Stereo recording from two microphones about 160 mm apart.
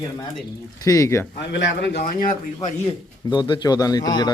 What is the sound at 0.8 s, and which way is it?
Speech, 20° left (ahead or behind).